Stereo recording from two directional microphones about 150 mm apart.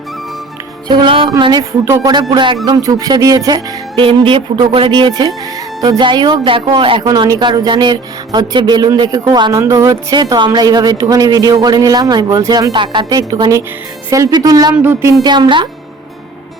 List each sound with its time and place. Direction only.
0.9 s speech: 30° right (ahead or behind)
1.8 s speech: 15° right (ahead or behind)
2.3 s speech: 30° right (ahead or behind)
7.0 s speech: 25° right (ahead or behind)
14.8 s speech: 15° right (ahead or behind)
15.2 s speech: 30° right (ahead or behind)